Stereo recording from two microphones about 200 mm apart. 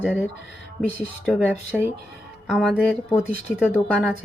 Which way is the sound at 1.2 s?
5° left (ahead or behind).